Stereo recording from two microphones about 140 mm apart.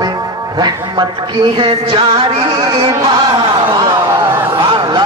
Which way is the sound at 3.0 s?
30° right (ahead or behind).